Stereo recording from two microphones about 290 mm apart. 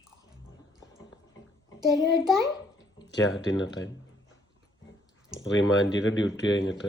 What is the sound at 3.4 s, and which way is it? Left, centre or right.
Speech, left.